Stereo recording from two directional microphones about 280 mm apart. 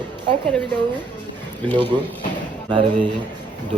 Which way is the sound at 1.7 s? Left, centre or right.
Centre.